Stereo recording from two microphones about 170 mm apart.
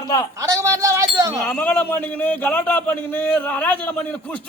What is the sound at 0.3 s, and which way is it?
Chink, 20° right (ahead or behind).